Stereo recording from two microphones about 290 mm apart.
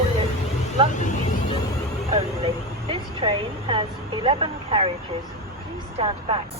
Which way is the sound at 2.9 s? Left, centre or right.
Centre.